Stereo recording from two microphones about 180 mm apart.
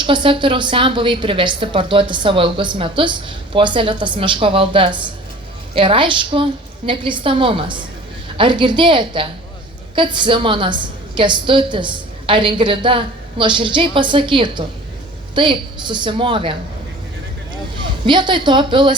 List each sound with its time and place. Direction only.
0.0 s a woman's voice: 25° right (ahead or behind)
18.0 s a woman's voice: 25° right (ahead or behind)